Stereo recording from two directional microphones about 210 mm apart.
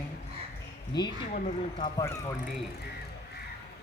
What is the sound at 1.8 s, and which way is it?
Speech, 20° left (ahead or behind).